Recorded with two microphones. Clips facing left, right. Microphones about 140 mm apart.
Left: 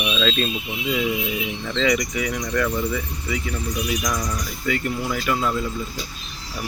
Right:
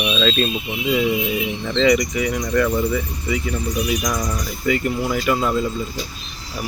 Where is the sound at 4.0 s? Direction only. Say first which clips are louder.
Right 2 dB; 15° right (ahead or behind).